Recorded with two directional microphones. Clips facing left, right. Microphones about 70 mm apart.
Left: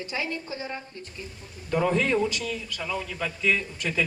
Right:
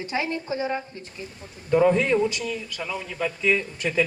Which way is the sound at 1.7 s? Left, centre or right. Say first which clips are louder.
Right 5 dB; centre.